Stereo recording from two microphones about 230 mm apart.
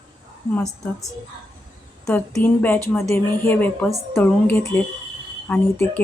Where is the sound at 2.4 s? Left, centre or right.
Centre.